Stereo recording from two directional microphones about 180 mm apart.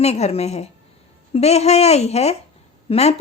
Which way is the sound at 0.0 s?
35° left (ahead or behind).